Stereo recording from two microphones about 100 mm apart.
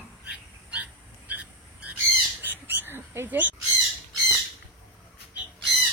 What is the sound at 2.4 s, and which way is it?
Squawk, 20° right (ahead or behind).